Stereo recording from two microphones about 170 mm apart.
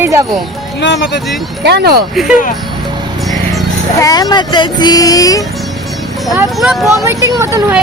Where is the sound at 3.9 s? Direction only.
20° left (ahead or behind).